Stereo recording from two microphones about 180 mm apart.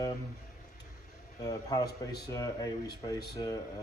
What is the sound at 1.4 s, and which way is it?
Speech, 20° left (ahead or behind).